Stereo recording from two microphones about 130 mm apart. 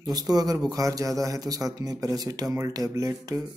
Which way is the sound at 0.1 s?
30° right (ahead or behind).